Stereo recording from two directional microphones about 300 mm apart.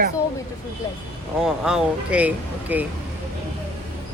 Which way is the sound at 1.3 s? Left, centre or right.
Centre.